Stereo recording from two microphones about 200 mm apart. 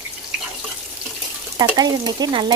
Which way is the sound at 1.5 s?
20° right (ahead or behind).